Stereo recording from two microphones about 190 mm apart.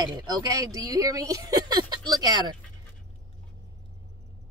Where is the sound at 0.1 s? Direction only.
20° right (ahead or behind).